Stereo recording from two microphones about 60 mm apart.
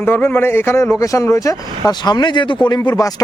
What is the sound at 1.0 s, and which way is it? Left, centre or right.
Speech, left.